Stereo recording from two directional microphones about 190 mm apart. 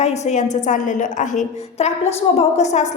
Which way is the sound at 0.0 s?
35° left (ahead or behind).